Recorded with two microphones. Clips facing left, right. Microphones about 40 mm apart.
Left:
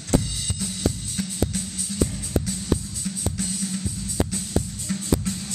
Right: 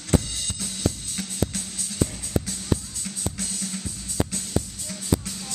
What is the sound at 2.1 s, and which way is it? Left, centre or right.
Music, centre.